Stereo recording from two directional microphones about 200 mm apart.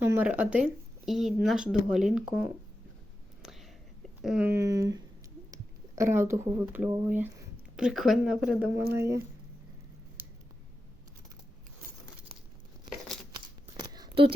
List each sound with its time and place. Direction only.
0.0 s speech: 10° right (ahead or behind)
3.4 s whispering: centre (ahead or behind)
4.2 s speech: 5° right (ahead or behind)
13.7 s a sound: 20° right (ahead or behind)